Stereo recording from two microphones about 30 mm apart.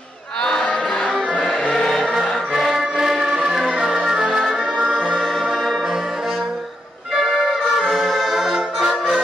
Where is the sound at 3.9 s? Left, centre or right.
Right.